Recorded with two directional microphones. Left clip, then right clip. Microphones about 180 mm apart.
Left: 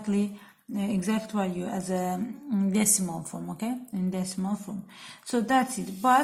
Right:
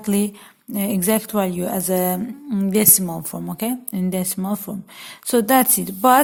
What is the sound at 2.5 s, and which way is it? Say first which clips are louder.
A woman's voice: right 8 dB; 50° right (ahead or behind).